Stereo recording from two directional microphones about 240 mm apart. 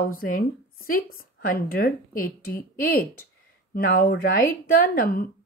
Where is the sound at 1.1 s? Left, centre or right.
Left.